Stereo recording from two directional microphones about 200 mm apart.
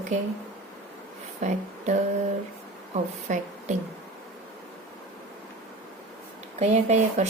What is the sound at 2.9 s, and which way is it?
Speech, 35° right (ahead or behind).